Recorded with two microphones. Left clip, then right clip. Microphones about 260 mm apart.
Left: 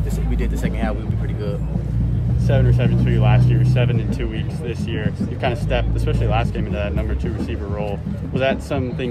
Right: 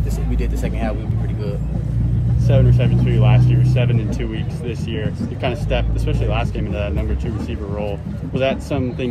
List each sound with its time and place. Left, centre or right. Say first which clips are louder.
2.4 s speech: right 1 dB; left
5.0 s speech: left 1 dB; left
8.4 s speech: right 1 dB; left